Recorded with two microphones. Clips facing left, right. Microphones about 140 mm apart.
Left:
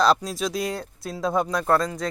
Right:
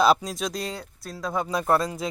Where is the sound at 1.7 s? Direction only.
25° right (ahead or behind).